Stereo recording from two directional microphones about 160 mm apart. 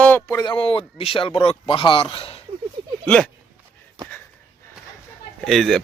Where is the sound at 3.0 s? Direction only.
5° left (ahead or behind).